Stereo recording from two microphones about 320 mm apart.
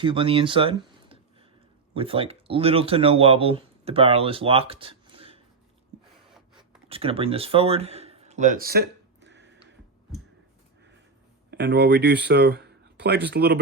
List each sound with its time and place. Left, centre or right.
0.0 s speech: centre
6.8 s speech: centre
9.2 s a sound: right
11.5 s speech: right